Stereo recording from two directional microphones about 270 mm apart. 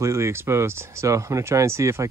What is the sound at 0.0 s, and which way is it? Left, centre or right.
Speech, centre.